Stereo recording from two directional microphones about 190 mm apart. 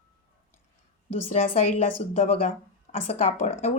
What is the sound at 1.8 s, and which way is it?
Speech, 40° left (ahead or behind).